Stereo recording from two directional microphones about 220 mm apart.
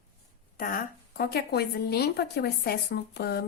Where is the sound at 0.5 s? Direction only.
40° left (ahead or behind).